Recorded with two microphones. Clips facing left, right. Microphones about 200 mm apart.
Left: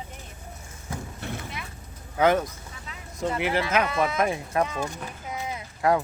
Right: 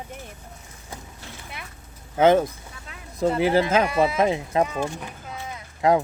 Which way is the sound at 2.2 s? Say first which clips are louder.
Right 4 dB; 25° right (ahead or behind).